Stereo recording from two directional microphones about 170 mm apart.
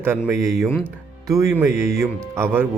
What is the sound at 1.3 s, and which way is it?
Speech, 20° right (ahead or behind).